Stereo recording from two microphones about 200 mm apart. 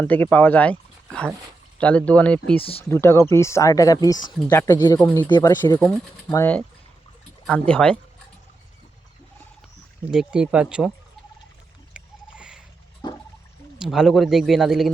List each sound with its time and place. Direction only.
0.0 s speech: 10° left (ahead or behind)
5.3 s speech: 20° left (ahead or behind)
5.8 s speech: 5° left (ahead or behind)
7.7 s a man's voice: 5° left (ahead or behind)
10.1 s a man's voice: 5° right (ahead or behind)
11.9 s rowboat: 5° right (ahead or behind)
13.0 s music: 20° left (ahead or behind)
13.7 s a man's voice: 5° right (ahead or behind)